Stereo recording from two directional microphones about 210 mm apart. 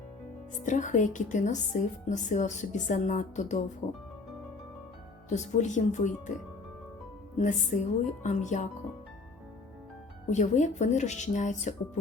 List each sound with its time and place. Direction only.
0.6 s a woman's voice: 35° left (ahead or behind)
5.3 s a woman's voice: 35° left (ahead or behind)
7.4 s a woman's voice: 35° left (ahead or behind)
10.2 s a woman's voice: 35° left (ahead or behind)